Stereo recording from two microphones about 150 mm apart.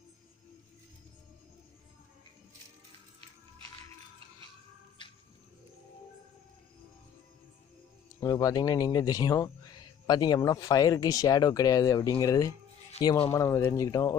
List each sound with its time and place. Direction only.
8.2 s speech: 25° left (ahead or behind)